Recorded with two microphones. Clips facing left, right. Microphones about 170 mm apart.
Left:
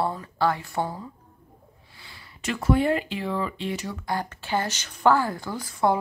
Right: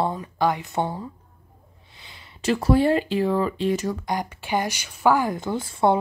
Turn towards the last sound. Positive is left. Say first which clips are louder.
# right 3 dB
turn(degrees=-25)  # may be behind; listen again after turning